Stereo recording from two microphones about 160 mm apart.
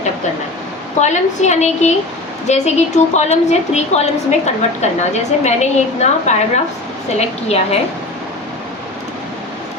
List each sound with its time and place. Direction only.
1.0 s a woman's voice: 45° left (ahead or behind)